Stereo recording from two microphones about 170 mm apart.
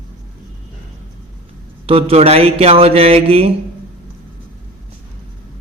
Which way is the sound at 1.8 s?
35° right (ahead or behind).